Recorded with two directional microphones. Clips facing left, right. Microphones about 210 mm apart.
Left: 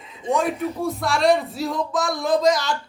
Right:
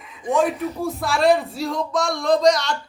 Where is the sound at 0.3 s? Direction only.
Centre (ahead or behind).